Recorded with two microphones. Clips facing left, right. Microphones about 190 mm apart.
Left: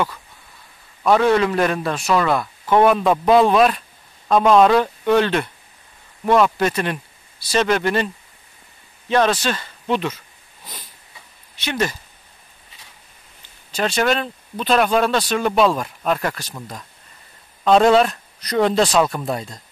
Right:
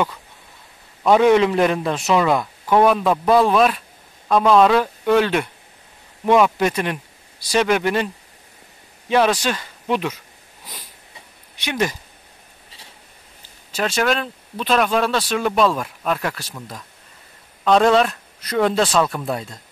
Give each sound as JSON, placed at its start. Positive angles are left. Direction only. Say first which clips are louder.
{"t": 1.0, "sound": "a man's voice", "louder": "right 2 dB", "side_deg": -15}
{"t": 2.7, "sound": "a man's voice", "louder": "left 1 dB", "side_deg": 0}
{"t": 9.1, "sound": "a man's voice", "louder": "even", "side_deg": -10}
{"t": 11.5, "sound": "a man's voice", "louder": "even", "side_deg": -15}
{"t": 13.7, "sound": "speech", "louder": "left 1 dB", "side_deg": 0}
{"t": 17.6, "sound": "speech", "louder": "left 1 dB", "side_deg": 5}